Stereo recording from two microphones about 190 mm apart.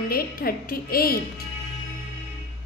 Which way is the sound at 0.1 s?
50° left (ahead or behind).